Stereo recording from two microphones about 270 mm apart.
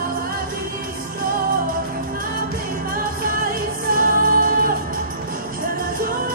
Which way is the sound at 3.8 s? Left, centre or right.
Right.